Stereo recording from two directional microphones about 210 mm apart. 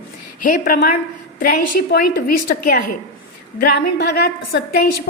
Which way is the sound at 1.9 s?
45° left (ahead or behind).